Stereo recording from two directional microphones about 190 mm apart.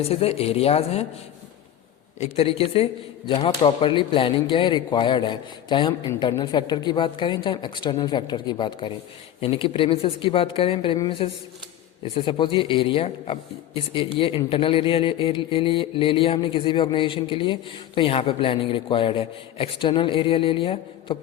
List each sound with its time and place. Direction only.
0.1 s speech: 30° left (ahead or behind)
2.1 s speech: 35° left (ahead or behind)